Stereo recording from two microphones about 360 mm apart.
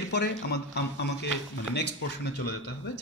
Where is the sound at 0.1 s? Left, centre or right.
Left.